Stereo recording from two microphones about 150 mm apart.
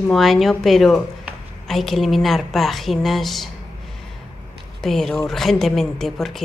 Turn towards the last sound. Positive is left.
turn(degrees=0)  # may be behind; listen again after turning